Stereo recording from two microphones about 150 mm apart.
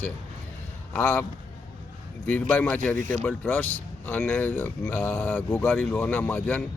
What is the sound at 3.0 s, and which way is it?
Speech, 55° right (ahead or behind).